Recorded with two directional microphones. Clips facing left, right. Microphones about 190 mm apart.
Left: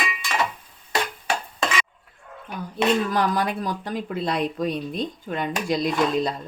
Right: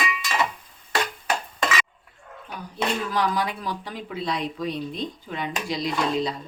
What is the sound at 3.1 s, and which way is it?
Speech, 50° left (ahead or behind).